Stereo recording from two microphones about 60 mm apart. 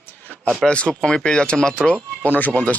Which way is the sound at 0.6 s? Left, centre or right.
Centre.